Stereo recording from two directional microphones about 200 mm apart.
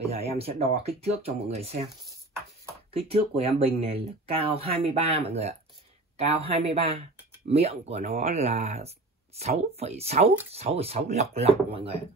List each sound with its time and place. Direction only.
0.0 s speech: 30° right (ahead or behind)
2.9 s speech: 30° right (ahead or behind)